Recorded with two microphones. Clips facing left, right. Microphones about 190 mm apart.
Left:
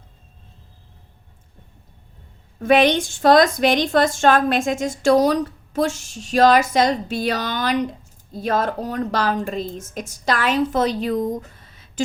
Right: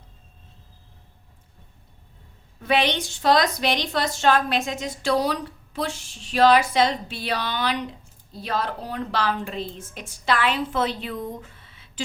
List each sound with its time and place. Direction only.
2.6 s a woman's voice: 45° left (ahead or behind)